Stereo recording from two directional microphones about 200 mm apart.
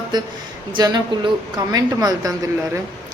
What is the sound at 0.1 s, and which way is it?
Speech, 20° right (ahead or behind).